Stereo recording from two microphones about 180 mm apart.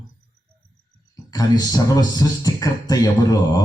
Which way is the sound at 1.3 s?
20° left (ahead or behind).